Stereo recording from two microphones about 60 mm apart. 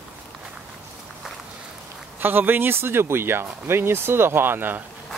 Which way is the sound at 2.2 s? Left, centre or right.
Right.